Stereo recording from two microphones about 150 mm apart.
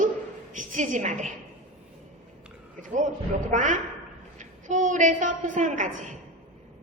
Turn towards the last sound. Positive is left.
turn(degrees=-55)  # may be behind; listen again after turning